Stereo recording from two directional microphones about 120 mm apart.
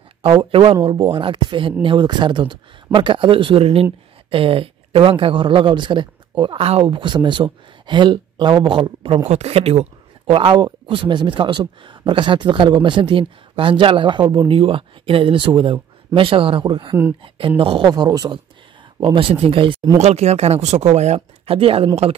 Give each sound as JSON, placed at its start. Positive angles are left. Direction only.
{"t": 0.2, "sound": "speech", "side_deg": -50}
{"t": 9.3, "sound": "speech", "side_deg": -60}
{"t": 17.8, "sound": "speech", "side_deg": -35}
{"t": 20.0, "sound": "speech", "side_deg": -65}